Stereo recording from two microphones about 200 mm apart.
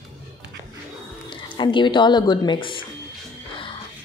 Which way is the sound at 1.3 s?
25° left (ahead or behind).